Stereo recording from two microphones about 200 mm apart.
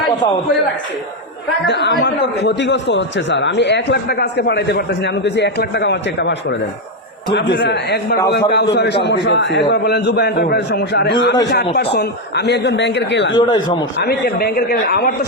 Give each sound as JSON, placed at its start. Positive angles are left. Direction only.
{"t": 1.6, "sound": "a man's voice", "side_deg": 55}
{"t": 13.4, "sound": "a man's voice", "side_deg": 25}
{"t": 14.0, "sound": "a man's voice", "side_deg": 50}